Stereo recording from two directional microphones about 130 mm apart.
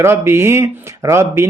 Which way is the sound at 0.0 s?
20° right (ahead or behind).